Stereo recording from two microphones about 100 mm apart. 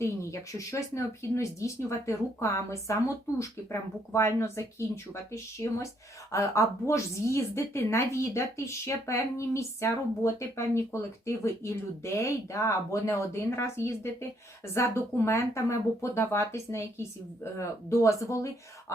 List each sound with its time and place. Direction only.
0.0 s a woman's voice: 30° left (ahead or behind)